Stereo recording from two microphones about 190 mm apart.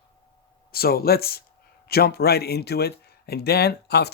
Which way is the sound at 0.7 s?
55° left (ahead or behind).